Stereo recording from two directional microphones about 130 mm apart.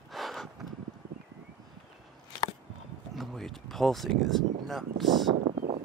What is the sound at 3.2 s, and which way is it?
Speech, centre (ahead or behind).